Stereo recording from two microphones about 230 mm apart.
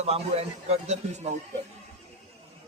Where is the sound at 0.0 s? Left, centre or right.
Right.